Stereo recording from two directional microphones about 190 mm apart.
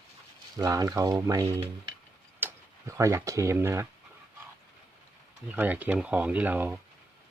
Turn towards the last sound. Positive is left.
turn(degrees=-10)  # may be behind; listen again after turning